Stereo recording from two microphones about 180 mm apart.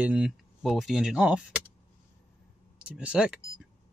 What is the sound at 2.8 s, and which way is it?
Speech, 5° right (ahead or behind).